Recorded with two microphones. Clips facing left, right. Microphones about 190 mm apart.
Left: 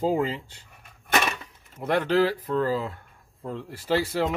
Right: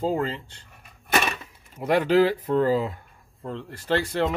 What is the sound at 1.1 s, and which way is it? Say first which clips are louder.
Speech: right 1 dB; 10° right (ahead or behind).